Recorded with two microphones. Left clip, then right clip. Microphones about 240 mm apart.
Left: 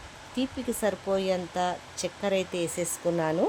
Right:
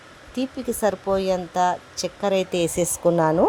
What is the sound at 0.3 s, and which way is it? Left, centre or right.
Speech, centre.